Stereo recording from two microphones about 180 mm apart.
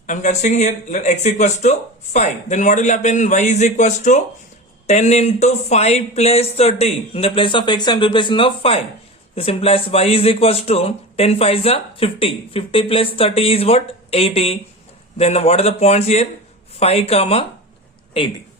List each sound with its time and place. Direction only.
0.1 s speech: 40° left (ahead or behind)